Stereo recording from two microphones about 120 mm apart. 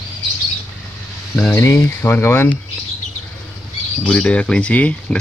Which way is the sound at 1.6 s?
20° left (ahead or behind).